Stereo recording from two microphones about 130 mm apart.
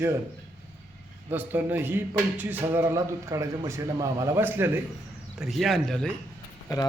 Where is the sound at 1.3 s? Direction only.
15° right (ahead or behind).